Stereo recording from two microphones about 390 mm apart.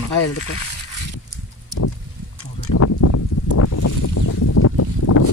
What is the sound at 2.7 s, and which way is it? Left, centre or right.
Boat, left.